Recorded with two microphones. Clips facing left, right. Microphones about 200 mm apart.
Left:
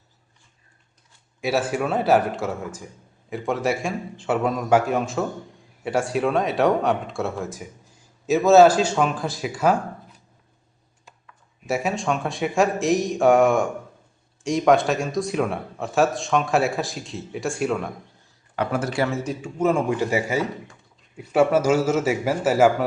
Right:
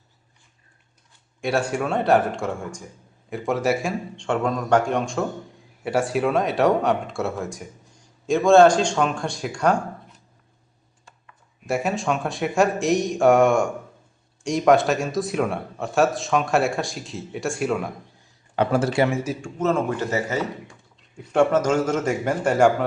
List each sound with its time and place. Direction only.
1.4 s speech: 5° left (ahead or behind)
11.6 s speech: centre (ahead or behind)
18.5 s speech: 30° right (ahead or behind)
19.2 s speech: 5° right (ahead or behind)
19.5 s a man's voice: 10° left (ahead or behind)